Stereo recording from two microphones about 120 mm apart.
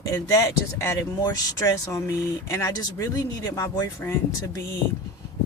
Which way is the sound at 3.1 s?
30° left (ahead or behind).